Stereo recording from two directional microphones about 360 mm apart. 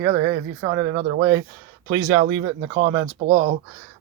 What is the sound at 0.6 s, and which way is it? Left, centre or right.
Speech, centre.